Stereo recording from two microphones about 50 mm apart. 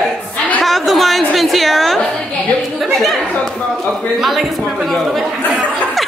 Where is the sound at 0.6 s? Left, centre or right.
Centre.